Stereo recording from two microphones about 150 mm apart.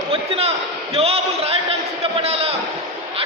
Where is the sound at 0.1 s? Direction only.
40° right (ahead or behind).